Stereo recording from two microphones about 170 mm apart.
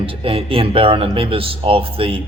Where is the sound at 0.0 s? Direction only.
30° right (ahead or behind).